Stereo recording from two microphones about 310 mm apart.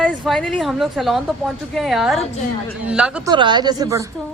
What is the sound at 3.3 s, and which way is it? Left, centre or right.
Speech, centre.